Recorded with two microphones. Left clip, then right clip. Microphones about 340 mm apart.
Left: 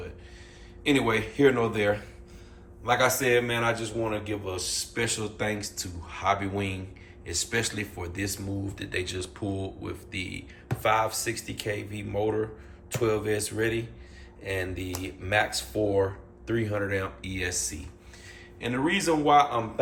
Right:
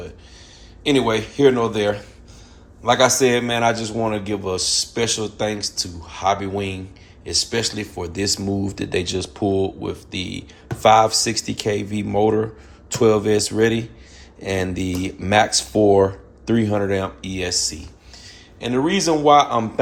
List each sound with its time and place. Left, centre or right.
0.9 s a man's voice: centre